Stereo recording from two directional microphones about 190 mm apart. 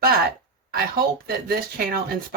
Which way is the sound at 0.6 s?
50° right (ahead or behind).